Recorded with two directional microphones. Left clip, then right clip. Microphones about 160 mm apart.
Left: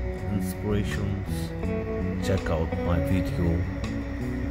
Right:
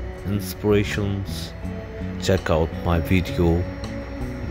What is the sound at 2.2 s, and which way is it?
Speech, 50° right (ahead or behind).